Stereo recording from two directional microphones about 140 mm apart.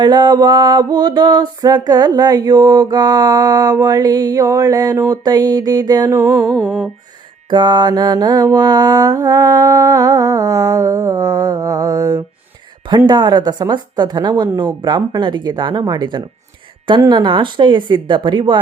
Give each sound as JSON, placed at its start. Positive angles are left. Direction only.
{"t": 0.0, "sound": "music", "side_deg": -30}
{"t": 6.1, "sound": "music", "side_deg": -15}
{"t": 6.5, "sound": "music", "side_deg": -5}
{"t": 7.5, "sound": "music", "side_deg": -35}
{"t": 13.1, "sound": "a woman's voice", "side_deg": -30}